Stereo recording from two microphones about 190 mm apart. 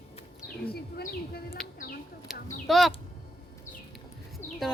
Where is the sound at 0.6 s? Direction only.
55° left (ahead or behind).